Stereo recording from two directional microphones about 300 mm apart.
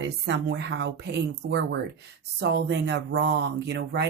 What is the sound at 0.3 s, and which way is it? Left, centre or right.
Speech, right.